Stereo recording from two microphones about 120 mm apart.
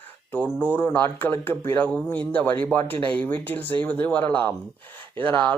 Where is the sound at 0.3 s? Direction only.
15° left (ahead or behind).